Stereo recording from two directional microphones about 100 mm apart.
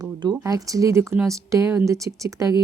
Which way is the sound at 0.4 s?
35° right (ahead or behind).